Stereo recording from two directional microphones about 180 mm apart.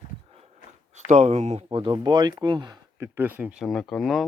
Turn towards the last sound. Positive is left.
turn(degrees=0)  # may be behind; listen again after turning